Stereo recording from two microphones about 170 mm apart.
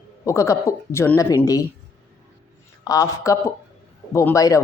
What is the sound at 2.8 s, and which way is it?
A woman's voice, 20° left (ahead or behind).